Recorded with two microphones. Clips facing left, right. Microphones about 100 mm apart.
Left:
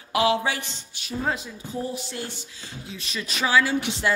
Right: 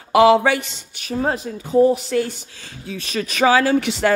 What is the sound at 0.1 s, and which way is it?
Speech, 75° right (ahead or behind).